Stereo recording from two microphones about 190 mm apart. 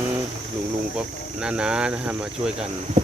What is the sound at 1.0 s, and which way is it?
Speech, 5° right (ahead or behind).